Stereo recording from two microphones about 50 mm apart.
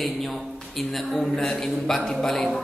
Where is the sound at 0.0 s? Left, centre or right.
Centre.